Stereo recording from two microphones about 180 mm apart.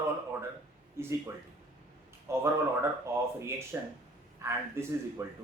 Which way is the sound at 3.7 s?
10° right (ahead or behind).